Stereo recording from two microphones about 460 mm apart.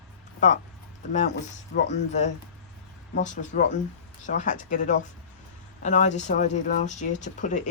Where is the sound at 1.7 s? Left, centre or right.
Centre.